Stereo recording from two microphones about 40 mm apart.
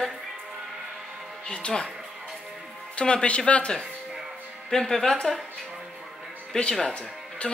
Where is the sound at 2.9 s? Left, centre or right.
Left.